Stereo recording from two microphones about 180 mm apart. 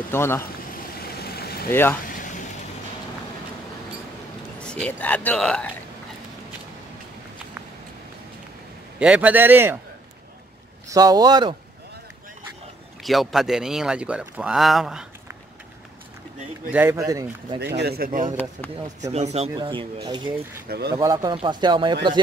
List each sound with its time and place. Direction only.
0.1 s a man's voice: 15° left (ahead or behind)
1.1 s vehicle: 60° left (ahead or behind)
1.7 s a man's voice: 10° left (ahead or behind)
2.0 s a sound: 50° left (ahead or behind)
4.6 s a man's voice: 5° left (ahead or behind)
9.0 s speech: 10° right (ahead or behind)
10.9 s speech: 20° right (ahead or behind)
13.0 s speech: centre (ahead or behind)
16.7 s speech: 15° right (ahead or behind)
17.7 s speech: 60° right (ahead or behind)
18.3 s a man's voice: 10° left (ahead or behind)
19.1 s speech: 35° right (ahead or behind); by 20.6 s 20° right (ahead or behind)
20.6 s speech: 60° right (ahead or behind)
20.9 s speech: 20° right (ahead or behind)